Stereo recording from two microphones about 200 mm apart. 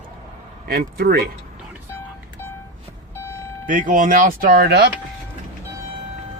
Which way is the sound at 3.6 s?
40° right (ahead or behind).